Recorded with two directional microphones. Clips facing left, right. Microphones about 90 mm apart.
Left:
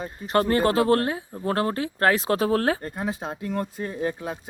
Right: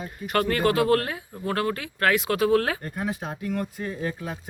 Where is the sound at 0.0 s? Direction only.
30° left (ahead or behind).